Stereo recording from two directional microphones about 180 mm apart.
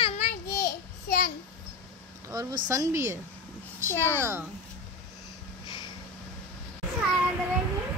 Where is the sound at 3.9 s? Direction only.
10° left (ahead or behind).